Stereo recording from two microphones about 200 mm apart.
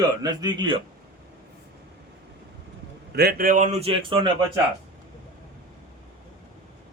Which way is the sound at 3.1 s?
50° right (ahead or behind).